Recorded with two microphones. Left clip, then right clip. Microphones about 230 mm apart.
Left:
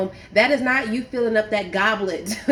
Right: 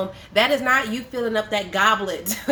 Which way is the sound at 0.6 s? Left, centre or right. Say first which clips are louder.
Right 1 dB; right.